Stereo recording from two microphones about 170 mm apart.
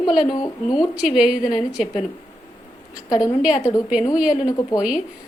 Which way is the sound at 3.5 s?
20° left (ahead or behind).